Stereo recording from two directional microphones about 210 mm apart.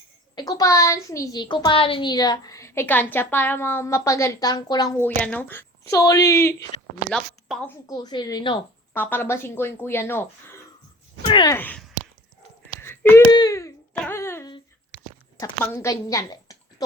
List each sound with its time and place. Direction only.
0.3 s a child's voice: 20° left (ahead or behind)
7.1 s a woman's voice: centre (ahead or behind)
7.9 s a woman's voice: 20° left (ahead or behind)
11.3 s speech: 20° left (ahead or behind)
11.5 s a child's voice: 10° left (ahead or behind)
12.8 s a sound: 10° left (ahead or behind)
13.3 s wail: 15° left (ahead or behind)
14.0 s a sound: 10° left (ahead or behind)
15.4 s a woman's voice: 15° left (ahead or behind)